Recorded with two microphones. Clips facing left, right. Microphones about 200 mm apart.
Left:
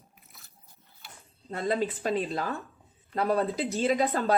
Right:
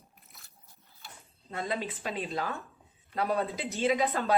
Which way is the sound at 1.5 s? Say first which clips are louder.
Left 6 dB; 35° left (ahead or behind).